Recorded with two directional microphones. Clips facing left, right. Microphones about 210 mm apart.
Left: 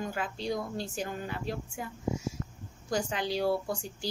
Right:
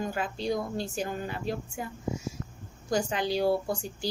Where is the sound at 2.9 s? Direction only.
40° right (ahead or behind).